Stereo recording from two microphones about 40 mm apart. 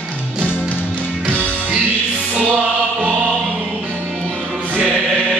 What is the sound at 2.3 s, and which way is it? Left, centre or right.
Music, right.